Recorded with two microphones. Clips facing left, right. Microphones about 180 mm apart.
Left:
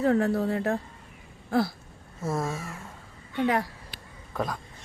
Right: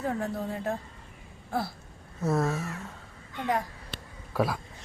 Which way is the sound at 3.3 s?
85° left.